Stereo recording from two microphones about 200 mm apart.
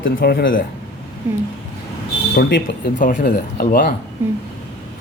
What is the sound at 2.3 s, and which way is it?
Speech, 60° left (ahead or behind).